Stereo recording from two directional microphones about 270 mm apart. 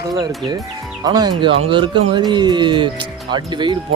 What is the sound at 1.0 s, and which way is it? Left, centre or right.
Speech, centre.